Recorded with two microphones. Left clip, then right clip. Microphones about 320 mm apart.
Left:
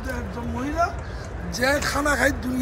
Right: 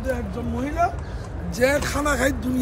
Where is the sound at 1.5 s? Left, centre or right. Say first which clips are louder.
Right 2 dB; centre.